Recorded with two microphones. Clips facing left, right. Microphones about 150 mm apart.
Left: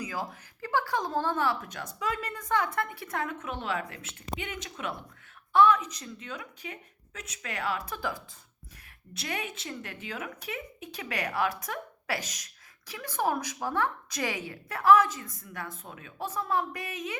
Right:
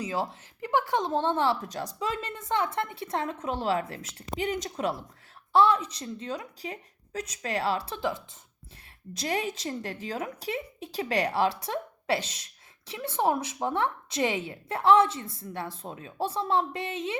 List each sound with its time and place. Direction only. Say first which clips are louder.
0.0 s a woman's voice: right 5 dB; 25° right (ahead or behind)
9.1 s a woman's voice: right 6 dB; 35° right (ahead or behind)